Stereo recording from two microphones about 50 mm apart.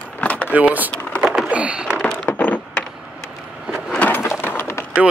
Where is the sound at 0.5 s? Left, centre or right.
Right.